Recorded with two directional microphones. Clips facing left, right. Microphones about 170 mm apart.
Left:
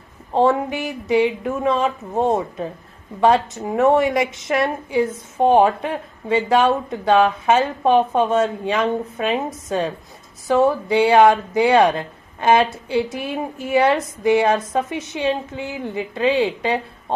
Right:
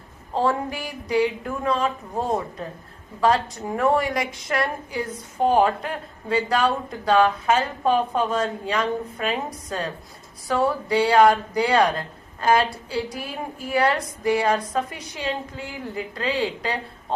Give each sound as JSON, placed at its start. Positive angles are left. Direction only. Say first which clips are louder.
{"t": 0.3, "sound": "a woman's voice", "louder": "left 6 dB", "side_deg": 25}
{"t": 3.6, "sound": "a woman's voice", "louder": "left 5 dB", "side_deg": 20}